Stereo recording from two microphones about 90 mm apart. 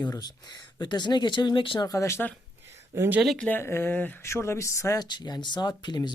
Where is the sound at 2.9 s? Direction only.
20° right (ahead or behind).